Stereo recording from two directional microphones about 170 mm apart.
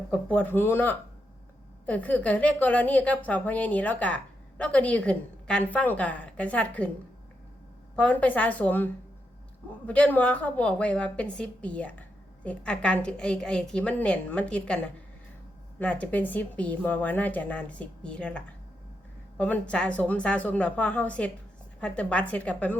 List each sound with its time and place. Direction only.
0.1 s a woman's voice: 10° left (ahead or behind)
7.9 s a woman's voice: 10° left (ahead or behind)